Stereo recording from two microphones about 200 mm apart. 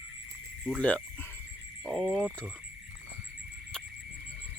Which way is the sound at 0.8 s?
5° left (ahead or behind).